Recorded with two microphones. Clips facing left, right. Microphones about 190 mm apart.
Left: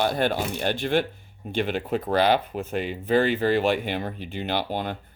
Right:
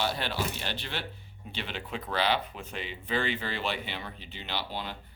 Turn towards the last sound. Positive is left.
turn(degrees=50)  # may be behind; listen again after turning